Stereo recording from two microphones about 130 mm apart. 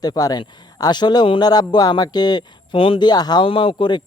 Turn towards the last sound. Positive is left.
turn(degrees=40)  # may be behind; listen again after turning